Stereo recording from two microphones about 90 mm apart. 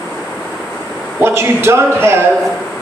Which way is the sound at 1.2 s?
30° right (ahead or behind).